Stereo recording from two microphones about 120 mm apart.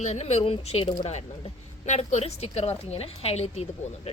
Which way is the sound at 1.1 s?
65° left (ahead or behind).